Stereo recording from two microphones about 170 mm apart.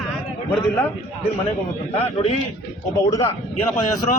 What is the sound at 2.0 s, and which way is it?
Speech, 35° left (ahead or behind).